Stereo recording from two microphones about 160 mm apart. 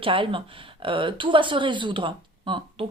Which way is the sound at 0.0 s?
35° right (ahead or behind).